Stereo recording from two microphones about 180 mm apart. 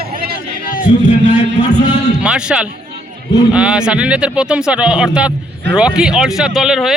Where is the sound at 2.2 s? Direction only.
5° right (ahead or behind).